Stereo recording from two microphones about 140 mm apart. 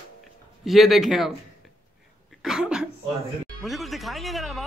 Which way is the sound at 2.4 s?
5° right (ahead or behind).